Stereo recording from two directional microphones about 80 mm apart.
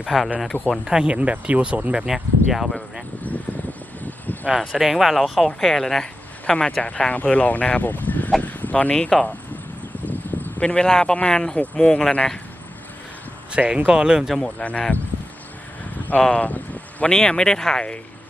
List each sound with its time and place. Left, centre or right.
0.0 s speech: centre
4.0 s a sound: left
4.6 s speech: centre
13.5 s speech: centre
14.4 s speech: centre
16.2 s speech: centre
17.1 s speech: centre